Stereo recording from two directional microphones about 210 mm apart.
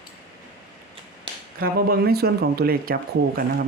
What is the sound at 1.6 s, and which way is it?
Speech, 45° right (ahead or behind).